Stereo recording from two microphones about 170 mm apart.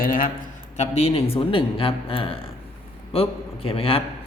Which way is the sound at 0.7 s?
40° left (ahead or behind).